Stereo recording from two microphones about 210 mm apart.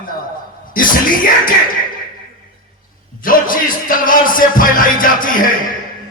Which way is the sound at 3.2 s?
40° left (ahead or behind).